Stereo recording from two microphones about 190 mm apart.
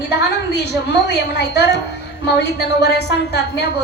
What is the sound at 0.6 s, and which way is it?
A woman's voice, 60° left (ahead or behind).